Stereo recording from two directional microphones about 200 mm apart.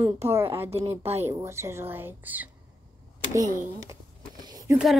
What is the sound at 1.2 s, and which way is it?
A woman's voice, 15° right (ahead or behind).